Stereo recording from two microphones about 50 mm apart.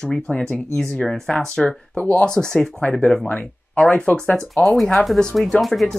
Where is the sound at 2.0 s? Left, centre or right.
Left.